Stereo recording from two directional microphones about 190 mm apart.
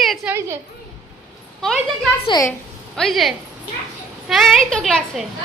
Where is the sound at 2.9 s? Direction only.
Centre (ahead or behind).